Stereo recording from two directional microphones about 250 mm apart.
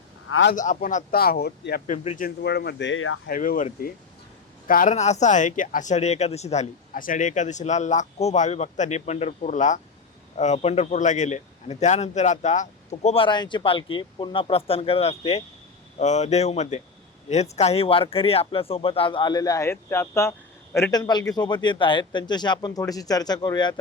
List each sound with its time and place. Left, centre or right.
0.3 s a man's voice: left
0.5 s speech: left
3.2 s speech: left; by 23.7 s centre